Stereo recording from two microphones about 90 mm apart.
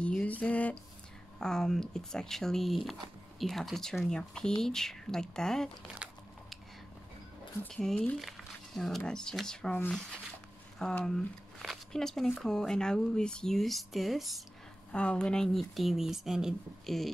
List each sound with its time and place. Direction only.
0.0 s a sound: 15° left (ahead or behind)
1.4 s speech: 5° left (ahead or behind)
6.0 s biting: 10° right (ahead or behind)
7.6 s speech: 10° left (ahead or behind)
10.8 s speech: 5° left (ahead or behind)
14.9 s speech: 10° left (ahead or behind)